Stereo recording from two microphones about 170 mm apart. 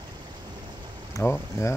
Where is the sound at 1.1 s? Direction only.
15° left (ahead or behind).